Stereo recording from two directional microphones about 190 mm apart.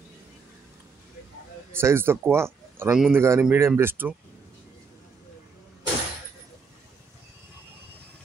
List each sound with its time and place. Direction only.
1.7 s speech: 10° right (ahead or behind)